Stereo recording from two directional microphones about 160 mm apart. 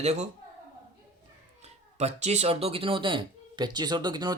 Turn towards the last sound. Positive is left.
turn(degrees=-25)  # may be behind; listen again after turning